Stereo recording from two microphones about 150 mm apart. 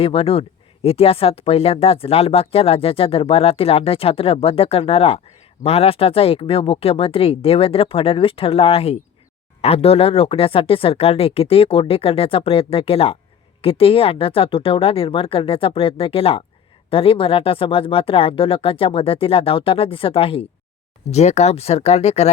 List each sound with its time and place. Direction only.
0.0 s speech: 40° left (ahead or behind)